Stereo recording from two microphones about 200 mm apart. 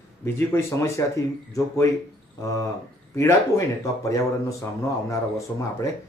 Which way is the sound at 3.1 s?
15° left (ahead or behind).